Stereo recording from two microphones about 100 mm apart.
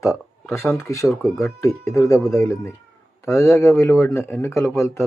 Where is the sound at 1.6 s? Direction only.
30° left (ahead or behind).